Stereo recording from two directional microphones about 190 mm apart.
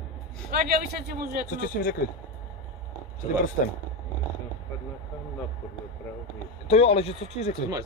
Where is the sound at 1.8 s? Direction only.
55° left (ahead or behind).